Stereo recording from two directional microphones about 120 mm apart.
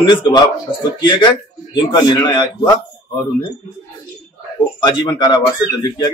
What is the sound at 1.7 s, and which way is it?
Speech, 40° left (ahead or behind).